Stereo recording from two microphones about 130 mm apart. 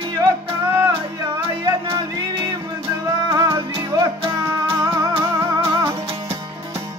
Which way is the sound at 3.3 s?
30° right (ahead or behind).